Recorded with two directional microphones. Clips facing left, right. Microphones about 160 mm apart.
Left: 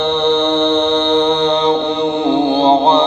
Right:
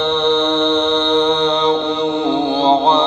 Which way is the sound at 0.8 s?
50° left (ahead or behind).